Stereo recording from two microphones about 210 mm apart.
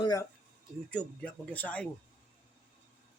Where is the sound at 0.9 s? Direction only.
5° left (ahead or behind).